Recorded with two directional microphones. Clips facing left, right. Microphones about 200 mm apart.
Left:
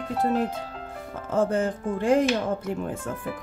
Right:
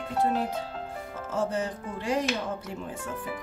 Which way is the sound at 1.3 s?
55° left (ahead or behind).